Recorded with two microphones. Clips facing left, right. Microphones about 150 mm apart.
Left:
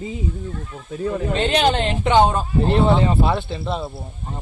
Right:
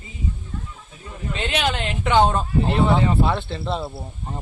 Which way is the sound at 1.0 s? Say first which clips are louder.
Left 12 dB; 90° left.